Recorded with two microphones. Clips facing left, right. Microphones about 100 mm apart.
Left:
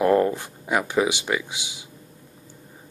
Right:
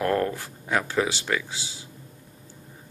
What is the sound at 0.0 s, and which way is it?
Speech, 15° left (ahead or behind).